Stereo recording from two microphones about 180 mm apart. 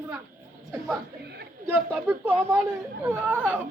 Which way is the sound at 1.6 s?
10° right (ahead or behind).